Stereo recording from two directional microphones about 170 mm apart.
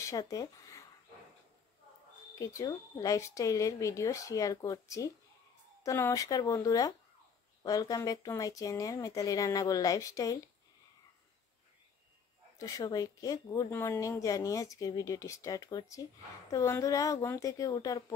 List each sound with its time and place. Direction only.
0.0 s speech: 20° left (ahead or behind)
2.3 s speech: 20° left (ahead or behind)
12.5 s speech: 20° left (ahead or behind)